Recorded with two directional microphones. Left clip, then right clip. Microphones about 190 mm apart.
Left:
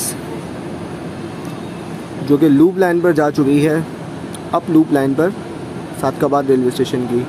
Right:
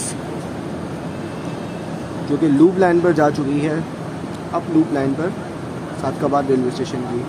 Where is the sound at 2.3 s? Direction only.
25° left (ahead or behind).